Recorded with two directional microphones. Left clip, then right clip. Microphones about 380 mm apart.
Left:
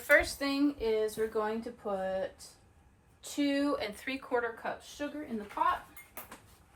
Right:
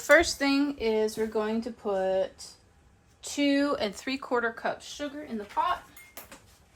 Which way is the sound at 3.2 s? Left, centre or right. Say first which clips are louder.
Right 5 dB; right.